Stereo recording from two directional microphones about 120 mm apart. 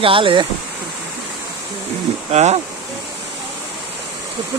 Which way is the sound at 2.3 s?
70° right (ahead or behind).